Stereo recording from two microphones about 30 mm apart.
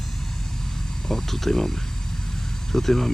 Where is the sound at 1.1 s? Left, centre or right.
Centre.